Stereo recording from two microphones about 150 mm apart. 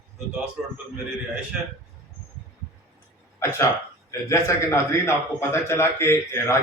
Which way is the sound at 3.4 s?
15° left (ahead or behind).